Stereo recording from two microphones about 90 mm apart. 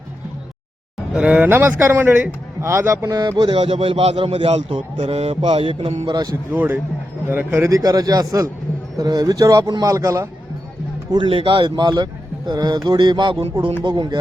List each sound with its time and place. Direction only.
1.1 s speech: 15° right (ahead or behind)
2.6 s a man's voice: 30° right (ahead or behind); by 3.5 s 50° right (ahead or behind)
3.5 s a man's voice: 90° right
5.4 s mantra: 70° right (ahead or behind)
6.1 s a sound: 50° right (ahead or behind)
6.5 s speech: 20° right (ahead or behind)
7.7 s a sound: 45° right (ahead or behind)
9.0 s a man's voice: 45° right (ahead or behind)
11.1 s speech: 75° right (ahead or behind); by 12.0 s 55° right (ahead or behind)
12.5 s a sound: 50° right (ahead or behind)
13.5 s speech: 55° right (ahead or behind)